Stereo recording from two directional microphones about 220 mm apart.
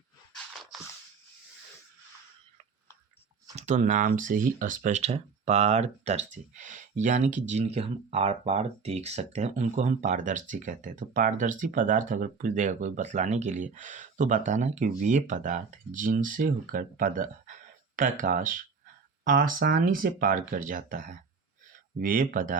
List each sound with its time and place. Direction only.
3.5 s speech: 30° right (ahead or behind)